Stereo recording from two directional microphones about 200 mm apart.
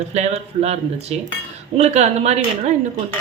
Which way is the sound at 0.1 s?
35° right (ahead or behind).